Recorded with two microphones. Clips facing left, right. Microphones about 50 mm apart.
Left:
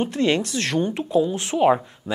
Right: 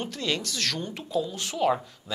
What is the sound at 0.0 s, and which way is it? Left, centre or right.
Speech, left.